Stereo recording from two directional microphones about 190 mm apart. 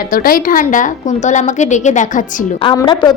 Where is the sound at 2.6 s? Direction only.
25° left (ahead or behind).